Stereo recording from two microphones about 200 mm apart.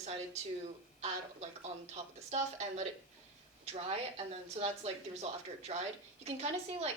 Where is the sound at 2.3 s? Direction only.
35° right (ahead or behind).